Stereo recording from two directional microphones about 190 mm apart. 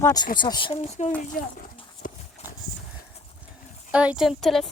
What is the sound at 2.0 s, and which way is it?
Clip-clop, 45° left (ahead or behind).